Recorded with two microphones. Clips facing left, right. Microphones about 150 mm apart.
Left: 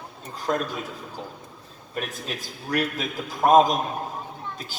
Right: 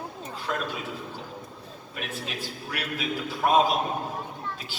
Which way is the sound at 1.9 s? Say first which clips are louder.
Left 4 dB; 40° left (ahead or behind).